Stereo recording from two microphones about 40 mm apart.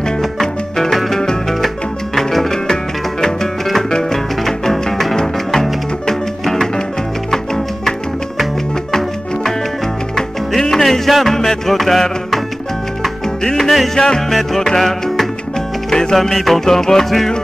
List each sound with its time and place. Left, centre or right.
0.2 s music: centre
10.1 s music: centre
13.4 s music: centre
14.8 s music: centre